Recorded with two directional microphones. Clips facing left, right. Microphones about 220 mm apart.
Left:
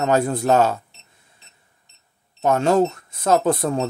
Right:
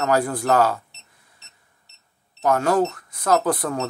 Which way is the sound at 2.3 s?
25° left (ahead or behind).